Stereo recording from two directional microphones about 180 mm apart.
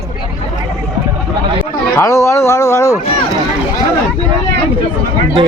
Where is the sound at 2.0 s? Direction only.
15° left (ahead or behind).